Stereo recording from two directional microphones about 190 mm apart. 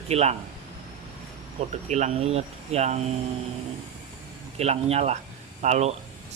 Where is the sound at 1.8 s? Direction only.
35° right (ahead or behind).